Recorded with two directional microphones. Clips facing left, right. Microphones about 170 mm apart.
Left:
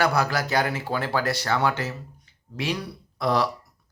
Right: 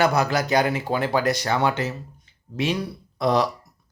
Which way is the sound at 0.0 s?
20° right (ahead or behind).